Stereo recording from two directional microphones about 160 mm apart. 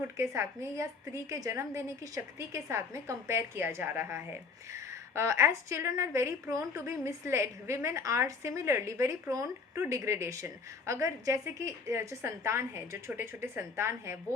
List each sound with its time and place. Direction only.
0.2 s a woman's voice: 15° right (ahead or behind)